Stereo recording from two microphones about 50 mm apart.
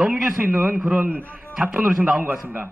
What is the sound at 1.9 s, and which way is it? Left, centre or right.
Speech, centre.